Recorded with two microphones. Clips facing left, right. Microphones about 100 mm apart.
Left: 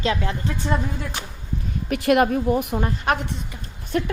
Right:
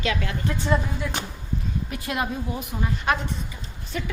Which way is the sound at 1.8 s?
70° left (ahead or behind).